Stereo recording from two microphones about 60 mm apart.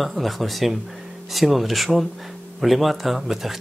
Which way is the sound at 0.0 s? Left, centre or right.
Centre.